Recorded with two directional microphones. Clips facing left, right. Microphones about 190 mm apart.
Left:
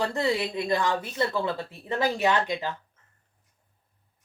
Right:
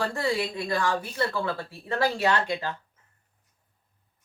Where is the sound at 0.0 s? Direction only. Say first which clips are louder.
Left 1 dB; 20° left (ahead or behind).